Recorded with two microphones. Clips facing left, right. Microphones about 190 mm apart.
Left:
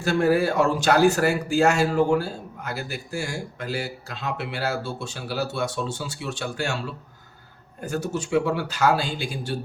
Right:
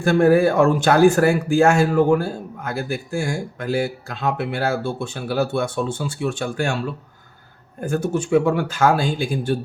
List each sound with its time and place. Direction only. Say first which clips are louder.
0.0 s speech: right 6 dB; 55° right (ahead or behind)
7.8 s speech: right 6 dB; 50° right (ahead or behind)